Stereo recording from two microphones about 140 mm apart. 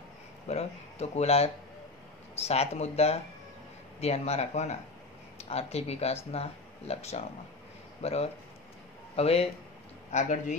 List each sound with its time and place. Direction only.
0.5 s speech: 50° left (ahead or behind)
10.1 s a man's voice: 60° left (ahead or behind)